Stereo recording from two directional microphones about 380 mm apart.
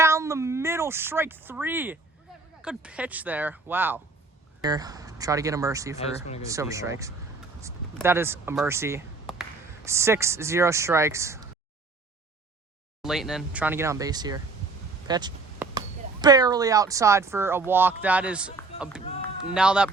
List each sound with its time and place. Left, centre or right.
0.0 s speech: centre
6.0 s speech: centre
6.4 s speech: centre
13.0 s speech: centre
15.0 s a sound: centre
16.2 s speech: centre